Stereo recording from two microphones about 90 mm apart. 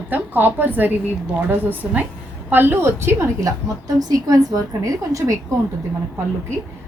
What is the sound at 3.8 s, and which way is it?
A woman's voice, 45° right (ahead or behind).